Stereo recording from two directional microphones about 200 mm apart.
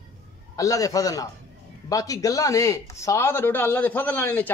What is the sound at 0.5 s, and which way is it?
Speech, 15° left (ahead or behind).